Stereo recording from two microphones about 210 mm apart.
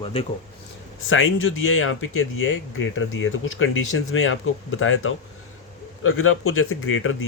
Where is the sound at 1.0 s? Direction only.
70° left (ahead or behind).